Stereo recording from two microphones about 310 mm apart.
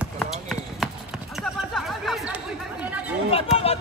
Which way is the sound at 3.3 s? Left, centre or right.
Centre.